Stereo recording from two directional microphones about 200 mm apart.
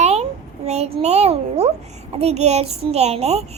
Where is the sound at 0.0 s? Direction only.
30° right (ahead or behind).